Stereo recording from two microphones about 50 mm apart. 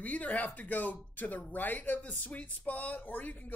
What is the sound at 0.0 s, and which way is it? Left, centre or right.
Speech, left.